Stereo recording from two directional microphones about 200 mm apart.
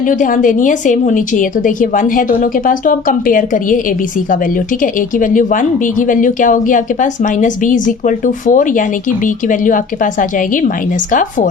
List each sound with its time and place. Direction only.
0.0 s a woman's voice: 40° left (ahead or behind)